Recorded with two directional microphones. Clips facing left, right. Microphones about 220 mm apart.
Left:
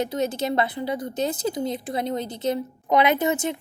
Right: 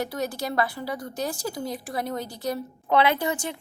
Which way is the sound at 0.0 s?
20° left (ahead or behind).